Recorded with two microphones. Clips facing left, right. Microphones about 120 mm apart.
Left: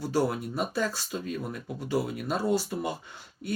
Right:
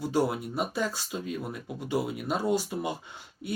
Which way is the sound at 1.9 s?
20° right (ahead or behind).